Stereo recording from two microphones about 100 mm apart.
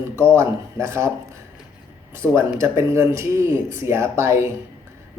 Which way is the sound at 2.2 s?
25° right (ahead or behind).